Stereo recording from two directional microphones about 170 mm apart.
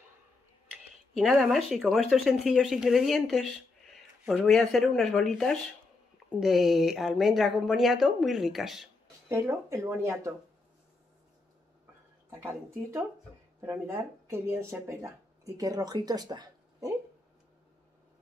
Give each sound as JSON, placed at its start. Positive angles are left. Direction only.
{"t": 1.1, "sound": "speech", "side_deg": 0}
{"t": 9.3, "sound": "speech", "side_deg": -15}
{"t": 13.6, "sound": "speech", "side_deg": -15}